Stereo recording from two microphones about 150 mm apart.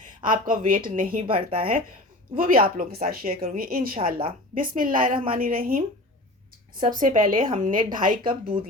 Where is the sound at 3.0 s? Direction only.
90° right.